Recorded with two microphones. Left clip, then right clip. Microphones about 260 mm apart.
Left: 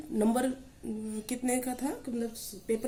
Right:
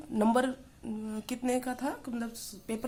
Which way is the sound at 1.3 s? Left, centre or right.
Right.